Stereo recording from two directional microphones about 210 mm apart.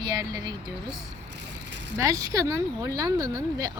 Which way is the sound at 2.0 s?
15° right (ahead or behind).